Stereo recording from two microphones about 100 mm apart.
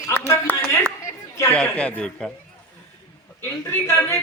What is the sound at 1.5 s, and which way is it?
Speech, 15° left (ahead or behind).